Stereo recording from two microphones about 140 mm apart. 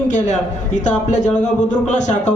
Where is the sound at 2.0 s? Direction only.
55° left (ahead or behind).